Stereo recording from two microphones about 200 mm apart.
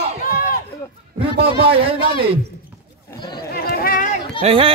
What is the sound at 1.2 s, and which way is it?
Speech, 25° right (ahead or behind).